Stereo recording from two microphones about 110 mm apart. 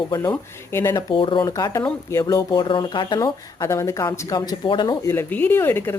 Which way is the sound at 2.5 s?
45° left (ahead or behind).